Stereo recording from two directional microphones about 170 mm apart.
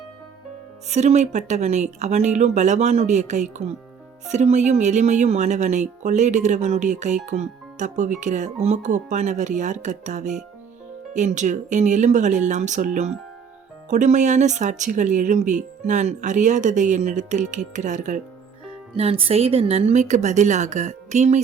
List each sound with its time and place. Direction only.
0.9 s speech: 40° right (ahead or behind)
18.9 s speech: 35° right (ahead or behind)